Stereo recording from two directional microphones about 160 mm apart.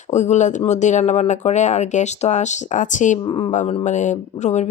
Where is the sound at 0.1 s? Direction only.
45° left (ahead or behind).